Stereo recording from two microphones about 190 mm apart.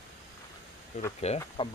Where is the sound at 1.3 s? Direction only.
30° left (ahead or behind).